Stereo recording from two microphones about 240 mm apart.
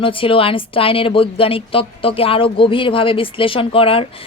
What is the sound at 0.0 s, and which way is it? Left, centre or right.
Speech, left.